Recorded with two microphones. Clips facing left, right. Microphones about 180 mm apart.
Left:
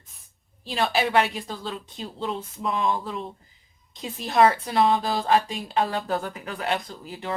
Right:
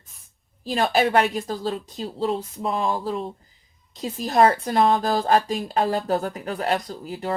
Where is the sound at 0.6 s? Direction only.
40° right (ahead or behind).